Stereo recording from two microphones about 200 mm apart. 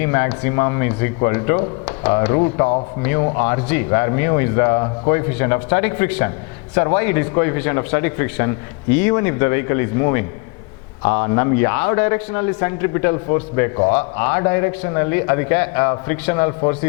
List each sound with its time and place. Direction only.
0.0 s a man's voice: 15° left (ahead or behind)